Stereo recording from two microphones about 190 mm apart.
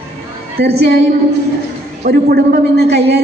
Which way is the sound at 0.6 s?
60° right (ahead or behind).